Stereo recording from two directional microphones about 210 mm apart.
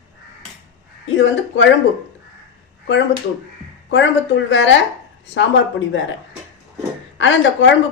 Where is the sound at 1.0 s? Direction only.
65° left (ahead or behind).